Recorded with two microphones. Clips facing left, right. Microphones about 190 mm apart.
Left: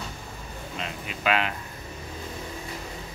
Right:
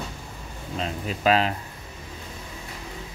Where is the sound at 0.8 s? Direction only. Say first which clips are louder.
Right 6 dB; 35° right (ahead or behind).